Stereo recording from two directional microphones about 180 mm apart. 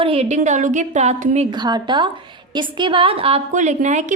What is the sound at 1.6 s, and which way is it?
A woman's voice, 25° right (ahead or behind).